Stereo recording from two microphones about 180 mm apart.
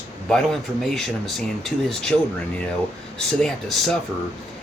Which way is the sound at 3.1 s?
Centre (ahead or behind).